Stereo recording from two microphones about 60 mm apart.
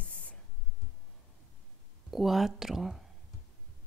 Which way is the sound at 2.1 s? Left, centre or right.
Centre.